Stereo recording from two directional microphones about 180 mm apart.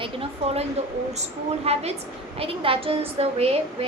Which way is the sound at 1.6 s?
35° right (ahead or behind).